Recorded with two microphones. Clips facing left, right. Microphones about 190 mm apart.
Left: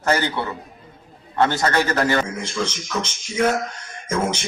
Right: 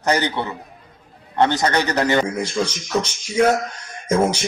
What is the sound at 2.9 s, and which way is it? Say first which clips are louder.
Speech: right 5 dB; 35° right (ahead or behind).